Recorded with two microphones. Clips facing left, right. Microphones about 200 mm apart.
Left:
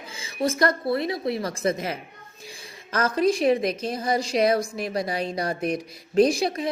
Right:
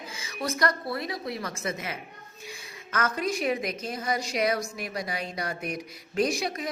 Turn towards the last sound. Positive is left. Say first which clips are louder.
# left 7 dB
turn(degrees=30)  # may be behind; listen again after turning